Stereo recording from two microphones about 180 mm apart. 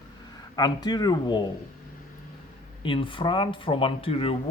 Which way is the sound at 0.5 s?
25° left (ahead or behind).